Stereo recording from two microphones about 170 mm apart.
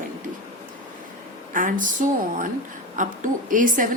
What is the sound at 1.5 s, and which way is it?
A woman's voice, 50° right (ahead or behind).